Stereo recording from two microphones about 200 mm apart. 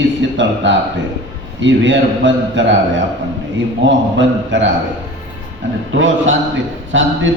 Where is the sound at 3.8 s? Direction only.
65° right (ahead or behind).